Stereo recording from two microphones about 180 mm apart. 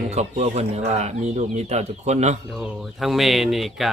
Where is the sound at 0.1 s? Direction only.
40° right (ahead or behind).